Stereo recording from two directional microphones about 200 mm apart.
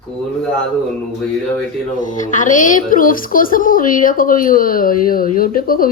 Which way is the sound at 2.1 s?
40° left (ahead or behind).